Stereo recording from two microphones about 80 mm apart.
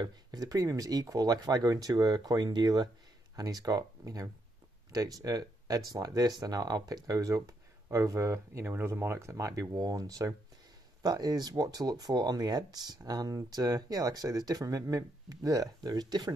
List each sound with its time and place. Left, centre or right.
0.0 s speech: right
3.3 s speech: right